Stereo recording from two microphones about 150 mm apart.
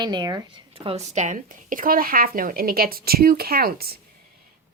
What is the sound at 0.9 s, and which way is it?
Speech, 45° right (ahead or behind).